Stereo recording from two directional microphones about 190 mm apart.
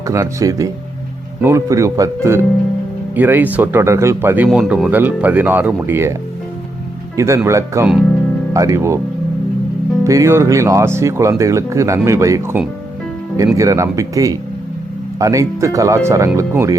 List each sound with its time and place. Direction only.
0.1 s speech: 15° right (ahead or behind)
7.2 s speech: 15° right (ahead or behind)
10.0 s speech: 15° right (ahead or behind)